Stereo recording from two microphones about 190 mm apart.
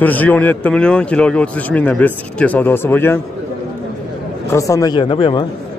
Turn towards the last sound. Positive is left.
turn(degrees=25)  # may be behind; listen again after turning